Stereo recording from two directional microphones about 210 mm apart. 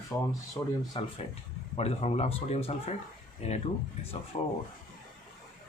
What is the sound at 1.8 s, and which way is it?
Speech, 30° left (ahead or behind).